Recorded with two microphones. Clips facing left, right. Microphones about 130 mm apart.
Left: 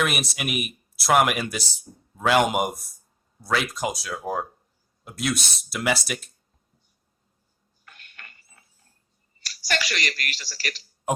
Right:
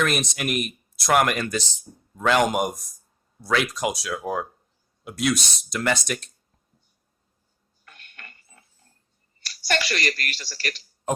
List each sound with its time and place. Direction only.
0.0 s speech: 5° left (ahead or behind)
7.9 s a sound: 40° right (ahead or behind)
9.9 s a man's voice: 40° right (ahead or behind)